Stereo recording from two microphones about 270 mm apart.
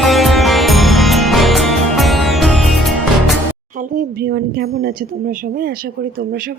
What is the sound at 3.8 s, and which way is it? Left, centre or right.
Speech, right.